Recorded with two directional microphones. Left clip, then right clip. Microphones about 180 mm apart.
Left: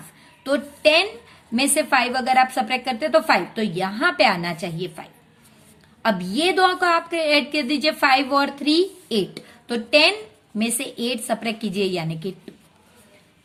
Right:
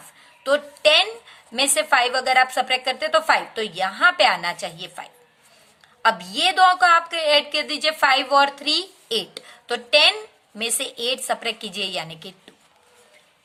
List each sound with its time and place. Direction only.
0.4 s a woman's voice: 25° right (ahead or behind)